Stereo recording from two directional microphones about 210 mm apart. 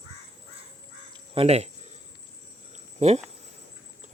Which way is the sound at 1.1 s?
25° right (ahead or behind).